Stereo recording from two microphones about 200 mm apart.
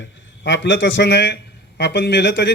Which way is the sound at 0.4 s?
65° left (ahead or behind).